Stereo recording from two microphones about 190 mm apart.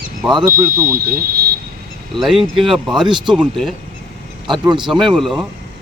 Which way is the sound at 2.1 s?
Centre (ahead or behind).